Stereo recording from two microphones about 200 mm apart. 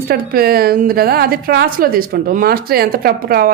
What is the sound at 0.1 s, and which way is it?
A woman's voice, 50° right (ahead or behind).